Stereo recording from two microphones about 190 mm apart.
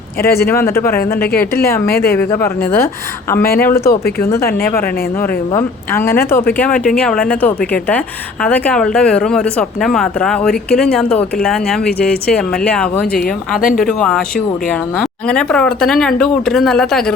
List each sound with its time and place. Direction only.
0.3 s speech: 15° left (ahead or behind)
0.9 s speech: 50° left (ahead or behind)
1.6 s speech: 15° left (ahead or behind)
1.9 s speech: 55° left (ahead or behind)
2.1 s a woman's voice: 15° left (ahead or behind)
13.6 s speech: 45° left (ahead or behind)
13.8 s a woman's voice: 5° left (ahead or behind)